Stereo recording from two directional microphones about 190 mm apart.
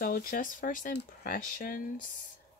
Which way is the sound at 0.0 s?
50° left (ahead or behind).